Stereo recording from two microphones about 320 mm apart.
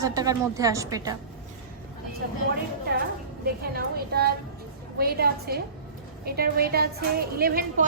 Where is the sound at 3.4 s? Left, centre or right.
Right.